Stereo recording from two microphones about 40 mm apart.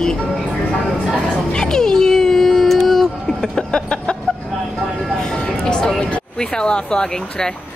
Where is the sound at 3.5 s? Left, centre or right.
Left.